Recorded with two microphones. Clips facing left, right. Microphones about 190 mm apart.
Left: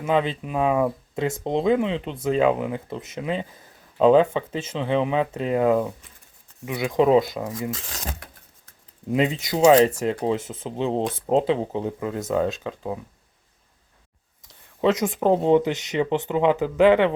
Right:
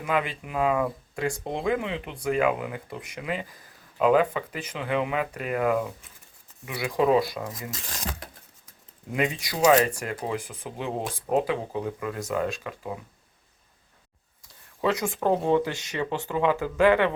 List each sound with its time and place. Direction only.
0.0 s speech: 25° left (ahead or behind)
9.0 s speech: 25° left (ahead or behind)
14.4 s speech: 20° left (ahead or behind)